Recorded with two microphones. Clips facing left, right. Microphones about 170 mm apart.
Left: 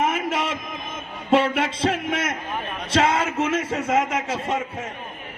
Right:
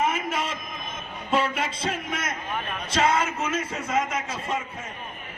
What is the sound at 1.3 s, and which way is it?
Speech, 70° left (ahead or behind).